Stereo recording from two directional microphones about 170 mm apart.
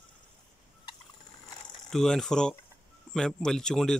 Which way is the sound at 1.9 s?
5° left (ahead or behind).